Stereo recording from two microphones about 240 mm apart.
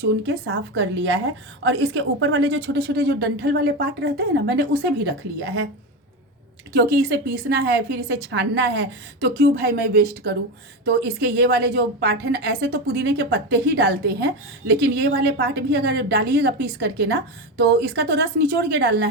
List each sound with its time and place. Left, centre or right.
0.0 s a woman's voice: right
6.7 s a woman's voice: right